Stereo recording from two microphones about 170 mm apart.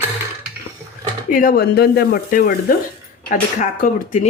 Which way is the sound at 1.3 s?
55° left (ahead or behind).